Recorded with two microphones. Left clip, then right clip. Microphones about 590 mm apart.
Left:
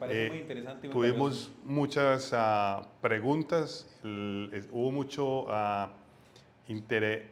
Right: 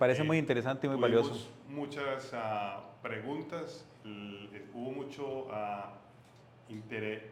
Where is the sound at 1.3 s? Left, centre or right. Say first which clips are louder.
Left 7 dB; left.